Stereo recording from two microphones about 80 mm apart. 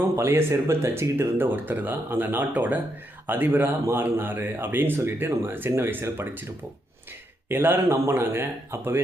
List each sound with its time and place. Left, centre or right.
0.2 s speech: right
7.4 s speech: right